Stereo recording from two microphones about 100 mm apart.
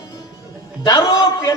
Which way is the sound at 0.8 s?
40° left (ahead or behind).